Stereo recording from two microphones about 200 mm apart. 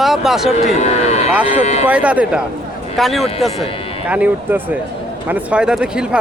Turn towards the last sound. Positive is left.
turn(degrees=-5)  # may be behind; listen again after turning